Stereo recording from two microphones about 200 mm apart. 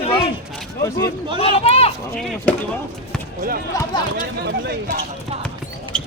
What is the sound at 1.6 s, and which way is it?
Speech, 30° left (ahead or behind).